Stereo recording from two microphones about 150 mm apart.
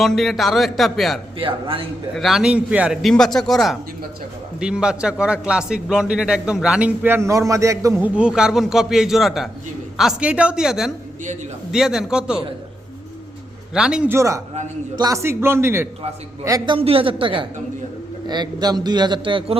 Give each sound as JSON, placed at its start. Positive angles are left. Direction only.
{"t": 0.0, "sound": "a man's voice", "side_deg": 0}
{"t": 1.4, "sound": "a woman's voice", "side_deg": -35}
{"t": 2.1, "sound": "a man's voice", "side_deg": 0}
{"t": 8.0, "sound": "a man's voice", "side_deg": -5}
{"t": 13.7, "sound": "a man's voice", "side_deg": -5}
{"t": 14.2, "sound": "a man's voice", "side_deg": -20}